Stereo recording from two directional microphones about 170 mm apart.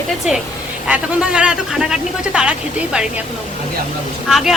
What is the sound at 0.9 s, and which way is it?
Speech, 5° right (ahead or behind).